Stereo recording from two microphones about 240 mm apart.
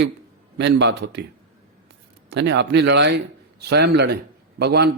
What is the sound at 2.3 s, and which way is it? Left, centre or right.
A man's voice, right.